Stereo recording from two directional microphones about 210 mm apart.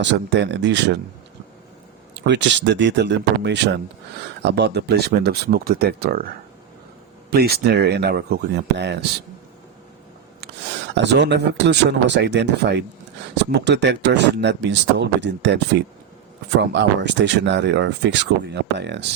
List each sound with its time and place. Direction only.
0.0 s speech: 60° right (ahead or behind)
2.1 s speech: 55° right (ahead or behind)
7.3 s speech: 50° right (ahead or behind)
10.4 s speech: 55° right (ahead or behind)